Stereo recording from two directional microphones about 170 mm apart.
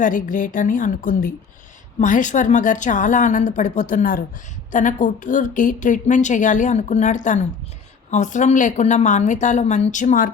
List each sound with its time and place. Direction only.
0.0 s a woman's voice: 50° left (ahead or behind)